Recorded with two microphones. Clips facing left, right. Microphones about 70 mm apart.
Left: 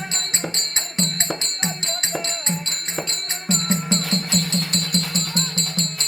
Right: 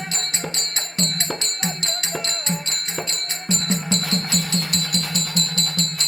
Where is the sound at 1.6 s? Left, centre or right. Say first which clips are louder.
Even; left.